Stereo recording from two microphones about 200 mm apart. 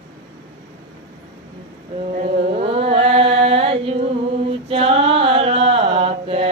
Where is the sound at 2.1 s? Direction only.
35° right (ahead or behind).